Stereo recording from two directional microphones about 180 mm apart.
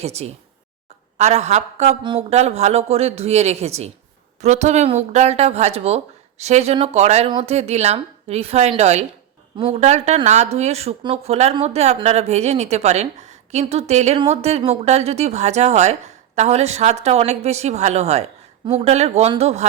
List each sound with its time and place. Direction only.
0.0 s a woman's voice: 35° right (ahead or behind)